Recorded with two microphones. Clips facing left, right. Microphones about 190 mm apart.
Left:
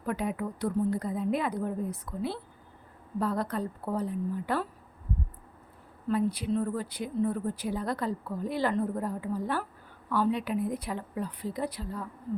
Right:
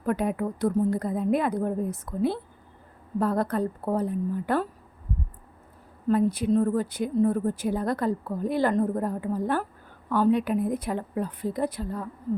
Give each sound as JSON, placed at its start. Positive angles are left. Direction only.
{"t": 0.0, "sound": "speech", "side_deg": -50}
{"t": 6.1, "sound": "speech", "side_deg": -45}